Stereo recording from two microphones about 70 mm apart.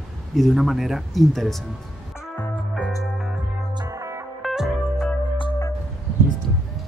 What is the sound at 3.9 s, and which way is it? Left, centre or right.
Music, right.